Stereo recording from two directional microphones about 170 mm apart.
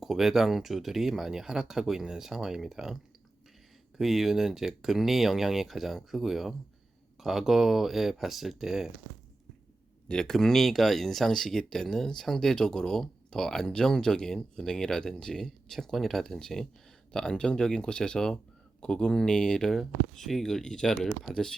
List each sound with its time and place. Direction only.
0.0 s speech: centre (ahead or behind)
10.1 s speech: 5° left (ahead or behind)